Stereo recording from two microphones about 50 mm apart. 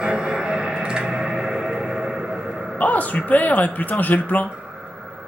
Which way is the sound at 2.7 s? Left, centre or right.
Left.